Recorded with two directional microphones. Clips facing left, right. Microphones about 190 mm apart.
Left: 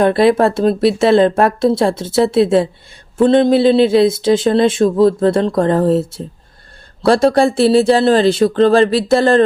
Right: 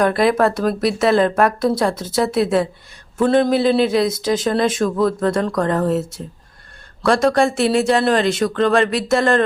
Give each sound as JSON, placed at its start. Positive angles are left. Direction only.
{"t": 0.0, "sound": "speech", "side_deg": 30}